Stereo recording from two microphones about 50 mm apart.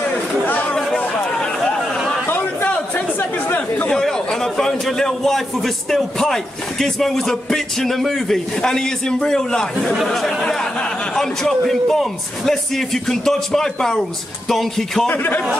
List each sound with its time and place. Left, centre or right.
0.7 s chatter: centre
2.2 s chatter: left
3.9 s a man's voice: centre
9.9 s music: centre
10.4 s a man's voice: centre
14.5 s music: centre
15.0 s a man's voice: left